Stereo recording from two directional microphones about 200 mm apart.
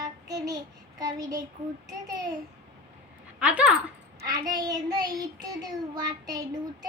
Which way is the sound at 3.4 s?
5° right (ahead or behind).